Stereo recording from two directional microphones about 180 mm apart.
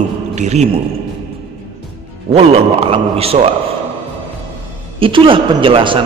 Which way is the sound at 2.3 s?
35° right (ahead or behind).